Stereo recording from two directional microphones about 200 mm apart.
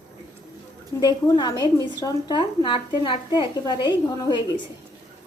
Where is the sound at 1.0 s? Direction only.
20° left (ahead or behind).